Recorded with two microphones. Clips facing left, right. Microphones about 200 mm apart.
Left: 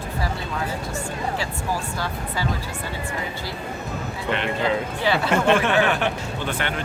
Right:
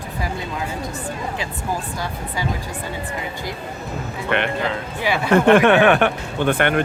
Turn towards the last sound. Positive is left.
turn(degrees=-55)  # may be behind; listen again after turning